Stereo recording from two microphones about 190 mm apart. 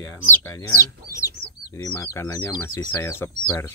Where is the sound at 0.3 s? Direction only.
15° left (ahead or behind).